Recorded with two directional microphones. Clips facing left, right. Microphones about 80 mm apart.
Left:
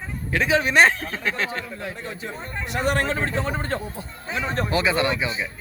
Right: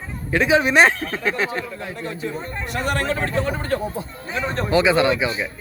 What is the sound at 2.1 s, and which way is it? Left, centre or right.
Speech, centre.